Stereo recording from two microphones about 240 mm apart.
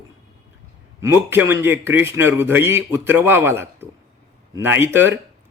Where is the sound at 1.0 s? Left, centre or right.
Centre.